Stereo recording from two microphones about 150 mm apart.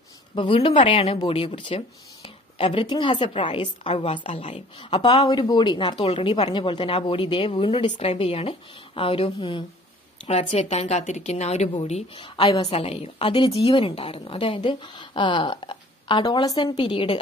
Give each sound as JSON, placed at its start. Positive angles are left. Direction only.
{"t": 0.4, "sound": "speech", "side_deg": 35}
{"t": 10.2, "sound": "a woman's voice", "side_deg": 45}